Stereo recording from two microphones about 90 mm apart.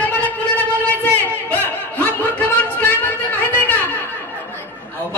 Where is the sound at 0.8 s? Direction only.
20° left (ahead or behind).